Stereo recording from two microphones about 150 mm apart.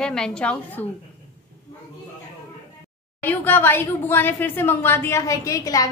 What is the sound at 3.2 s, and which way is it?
A woman's voice, 15° left (ahead or behind).